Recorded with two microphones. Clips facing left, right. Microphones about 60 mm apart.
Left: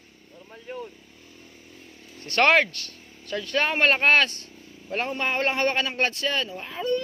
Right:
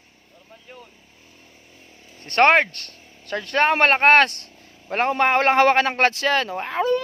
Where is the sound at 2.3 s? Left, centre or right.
Right.